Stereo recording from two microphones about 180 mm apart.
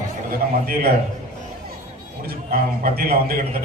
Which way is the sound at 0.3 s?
55° right (ahead or behind).